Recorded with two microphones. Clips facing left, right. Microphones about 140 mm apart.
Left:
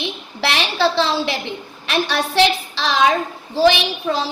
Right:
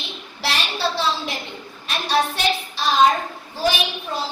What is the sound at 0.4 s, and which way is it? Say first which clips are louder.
A woman's voice: left 6 dB; 75° left (ahead or behind).